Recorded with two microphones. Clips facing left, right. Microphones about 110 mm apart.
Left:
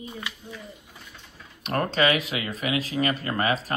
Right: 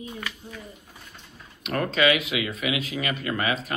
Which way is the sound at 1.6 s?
35° left (ahead or behind).